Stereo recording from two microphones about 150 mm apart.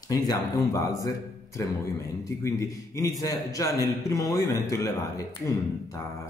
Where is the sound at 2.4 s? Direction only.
20° left (ahead or behind).